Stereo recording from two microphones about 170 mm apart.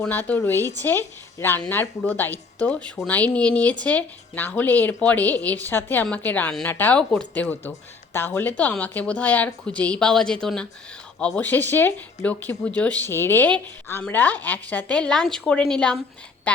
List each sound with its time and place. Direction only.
0.0 s a woman's voice: 10° left (ahead or behind)